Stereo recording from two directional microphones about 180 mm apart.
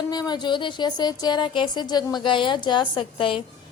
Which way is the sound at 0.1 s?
25° left (ahead or behind).